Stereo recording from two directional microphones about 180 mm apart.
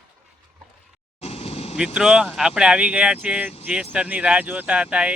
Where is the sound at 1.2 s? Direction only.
35° left (ahead or behind).